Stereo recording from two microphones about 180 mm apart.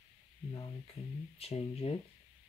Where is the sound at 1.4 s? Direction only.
35° left (ahead or behind).